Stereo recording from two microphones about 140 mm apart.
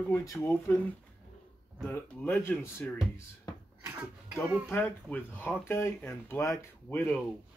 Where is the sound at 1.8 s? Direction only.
10° left (ahead or behind).